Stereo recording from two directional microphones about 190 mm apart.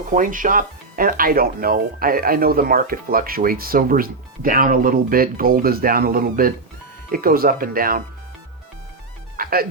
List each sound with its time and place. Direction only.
0.1 s speech: 45° right (ahead or behind)
9.3 s music: 50° right (ahead or behind)